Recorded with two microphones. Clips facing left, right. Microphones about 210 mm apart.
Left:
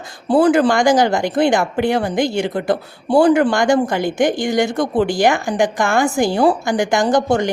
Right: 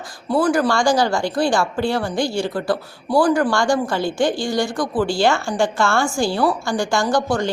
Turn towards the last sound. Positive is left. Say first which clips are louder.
# left 4 dB
turn(degrees=20)  # may be behind; listen again after turning